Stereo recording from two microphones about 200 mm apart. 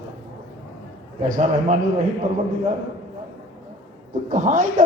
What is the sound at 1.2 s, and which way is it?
Speech, 40° right (ahead or behind).